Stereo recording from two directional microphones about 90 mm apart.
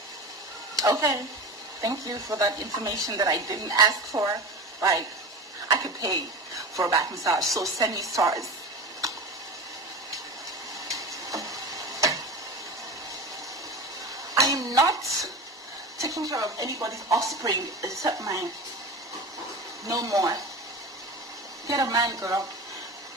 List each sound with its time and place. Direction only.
0.7 s a woman's voice: 40° right (ahead or behind)
10.9 s tick-tock: 40° right (ahead or behind)
14.3 s dishes: 40° right (ahead or behind)
16.0 s a woman's voice: 40° right (ahead or behind)
19.9 s a woman's voice: 40° right (ahead or behind)
21.6 s a woman's voice: 40° right (ahead or behind)